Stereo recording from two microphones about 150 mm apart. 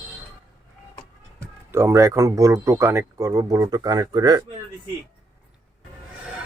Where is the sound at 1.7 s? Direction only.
20° right (ahead or behind).